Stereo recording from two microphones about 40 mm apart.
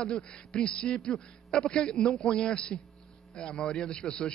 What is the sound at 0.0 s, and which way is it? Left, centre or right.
A man's voice, left.